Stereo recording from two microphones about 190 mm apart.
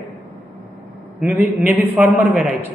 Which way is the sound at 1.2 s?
10° right (ahead or behind).